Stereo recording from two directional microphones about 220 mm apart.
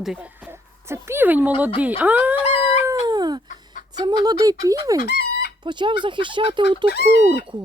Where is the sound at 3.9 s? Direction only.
20° right (ahead or behind).